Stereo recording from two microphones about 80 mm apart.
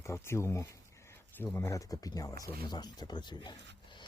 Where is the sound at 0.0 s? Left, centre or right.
Left.